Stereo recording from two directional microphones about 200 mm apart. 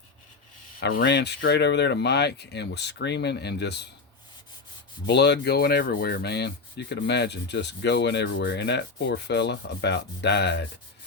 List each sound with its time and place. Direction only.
0.8 s speech: 50° left (ahead or behind)
5.0 s speech: 55° left (ahead or behind)